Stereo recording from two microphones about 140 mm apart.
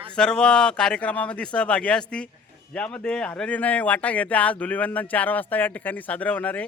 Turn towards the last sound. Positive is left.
turn(degrees=10)  # may be behind; listen again after turning